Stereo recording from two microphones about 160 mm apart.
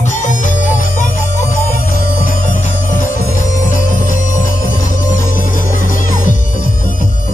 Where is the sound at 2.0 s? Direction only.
55° left (ahead or behind).